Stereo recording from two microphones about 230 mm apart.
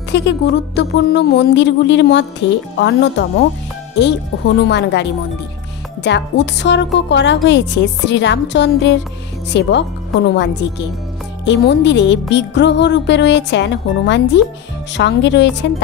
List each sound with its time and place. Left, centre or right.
0.1 s speech: left